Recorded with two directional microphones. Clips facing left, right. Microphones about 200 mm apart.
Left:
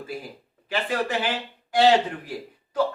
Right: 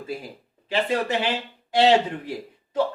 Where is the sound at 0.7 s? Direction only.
25° right (ahead or behind).